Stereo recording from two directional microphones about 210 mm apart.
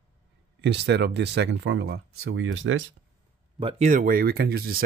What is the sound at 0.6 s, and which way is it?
Speech, 55° right (ahead or behind).